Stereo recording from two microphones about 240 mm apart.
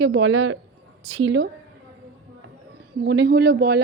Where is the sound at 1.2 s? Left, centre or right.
Right.